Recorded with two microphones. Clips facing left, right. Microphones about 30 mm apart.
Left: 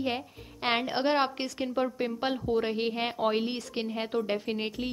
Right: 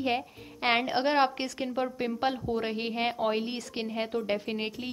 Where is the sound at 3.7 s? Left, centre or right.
Centre.